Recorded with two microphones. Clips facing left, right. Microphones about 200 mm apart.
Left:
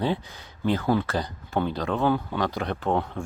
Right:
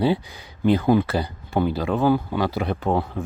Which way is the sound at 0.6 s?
15° right (ahead or behind).